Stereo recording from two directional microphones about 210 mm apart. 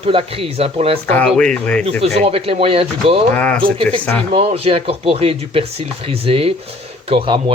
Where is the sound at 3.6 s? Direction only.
25° right (ahead or behind).